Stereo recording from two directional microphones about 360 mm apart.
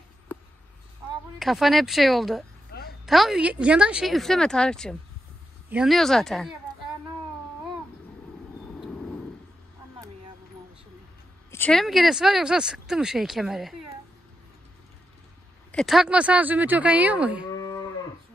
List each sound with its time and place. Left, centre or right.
1.4 s speech: centre
2.7 s a sound: left
3.1 s speech: centre
11.5 s speech: centre
15.7 s speech: centre
17.6 s moo: centre